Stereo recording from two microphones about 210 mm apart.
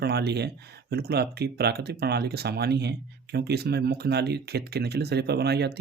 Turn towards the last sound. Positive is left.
turn(degrees=-50)  # may be behind; listen again after turning